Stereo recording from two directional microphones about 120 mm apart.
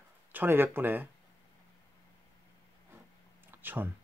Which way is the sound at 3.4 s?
15° right (ahead or behind).